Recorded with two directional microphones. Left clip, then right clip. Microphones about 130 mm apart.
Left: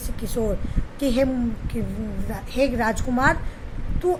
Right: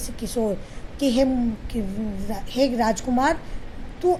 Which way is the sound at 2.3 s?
30° right (ahead or behind).